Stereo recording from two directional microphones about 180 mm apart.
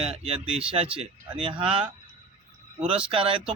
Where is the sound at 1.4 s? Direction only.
30° right (ahead or behind).